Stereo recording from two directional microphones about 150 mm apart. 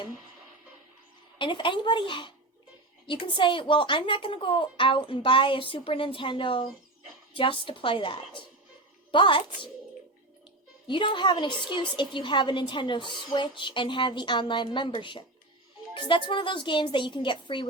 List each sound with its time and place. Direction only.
1.4 s a woman's voice: 30° left (ahead or behind)
10.8 s a woman's voice: 35° left (ahead or behind)